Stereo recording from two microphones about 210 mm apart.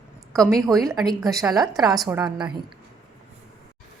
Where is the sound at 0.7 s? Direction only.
Centre (ahead or behind).